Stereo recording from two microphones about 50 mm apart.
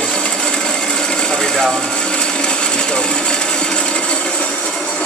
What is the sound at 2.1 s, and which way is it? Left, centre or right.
Sewing machine, centre.